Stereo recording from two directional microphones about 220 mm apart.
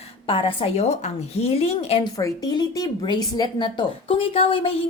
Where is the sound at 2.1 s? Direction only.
15° left (ahead or behind).